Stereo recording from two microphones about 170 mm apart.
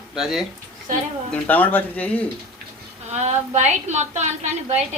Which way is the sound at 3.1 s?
40° right (ahead or behind).